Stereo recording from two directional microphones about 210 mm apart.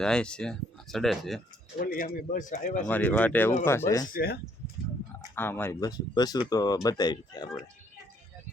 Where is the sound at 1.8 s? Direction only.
40° left (ahead or behind).